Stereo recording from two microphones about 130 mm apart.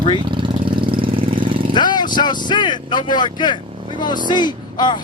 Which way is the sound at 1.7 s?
35° left (ahead or behind).